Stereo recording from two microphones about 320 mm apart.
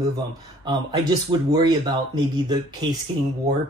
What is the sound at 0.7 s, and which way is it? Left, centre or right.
Speech, centre.